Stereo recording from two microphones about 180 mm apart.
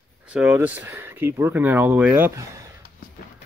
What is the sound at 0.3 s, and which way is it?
Speech, 10° right (ahead or behind).